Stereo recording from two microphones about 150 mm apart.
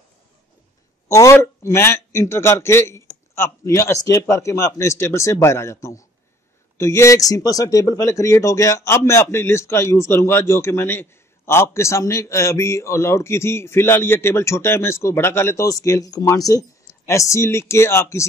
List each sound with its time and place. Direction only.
1.0 s speech: 20° left (ahead or behind)